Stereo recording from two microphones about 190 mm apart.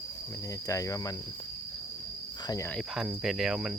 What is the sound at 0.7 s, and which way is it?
Speech, 15° left (ahead or behind).